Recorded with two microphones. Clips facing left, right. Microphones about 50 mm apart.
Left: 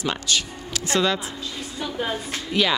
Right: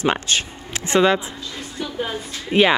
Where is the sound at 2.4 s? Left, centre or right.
Right.